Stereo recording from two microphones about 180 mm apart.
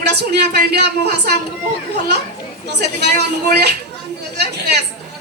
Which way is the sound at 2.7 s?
70° right (ahead or behind).